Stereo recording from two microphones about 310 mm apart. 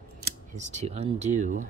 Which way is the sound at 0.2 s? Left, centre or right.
Right.